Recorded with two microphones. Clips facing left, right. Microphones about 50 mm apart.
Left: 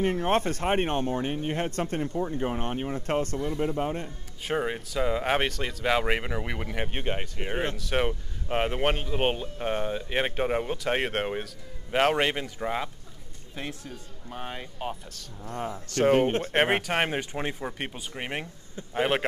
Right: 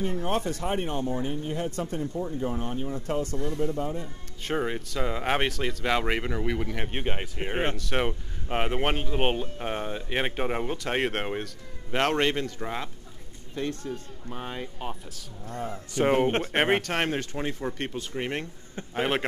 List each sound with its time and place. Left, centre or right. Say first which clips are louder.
0.0 s speech: left 3 dB; left
3.3 s speech: even; centre
3.6 s speech: left 1 dB; left
4.4 s speech: even; centre
6.9 s speech: even; centre
15.4 s a man's voice: left 1 dB; left
15.9 s speech: left 2 dB; centre
16.5 s speech: left 2 dB; centre